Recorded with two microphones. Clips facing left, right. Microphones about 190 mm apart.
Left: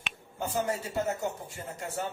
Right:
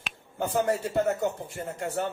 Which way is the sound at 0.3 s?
60° right (ahead or behind).